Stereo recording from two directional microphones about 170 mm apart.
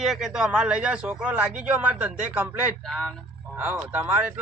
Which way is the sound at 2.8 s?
5° left (ahead or behind).